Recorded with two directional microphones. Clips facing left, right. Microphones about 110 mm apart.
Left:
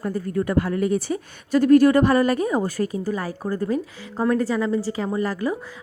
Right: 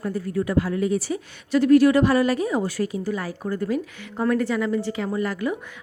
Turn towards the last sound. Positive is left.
turn(degrees=35)  # may be behind; listen again after turning